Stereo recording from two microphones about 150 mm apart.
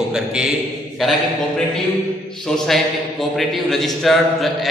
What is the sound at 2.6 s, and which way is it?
A man's voice, centre (ahead or behind).